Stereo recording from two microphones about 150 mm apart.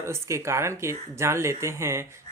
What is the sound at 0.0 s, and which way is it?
Speech, 20° right (ahead or behind).